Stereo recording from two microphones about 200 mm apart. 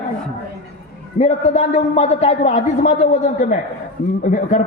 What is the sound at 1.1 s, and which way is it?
A man's voice, 35° left (ahead or behind).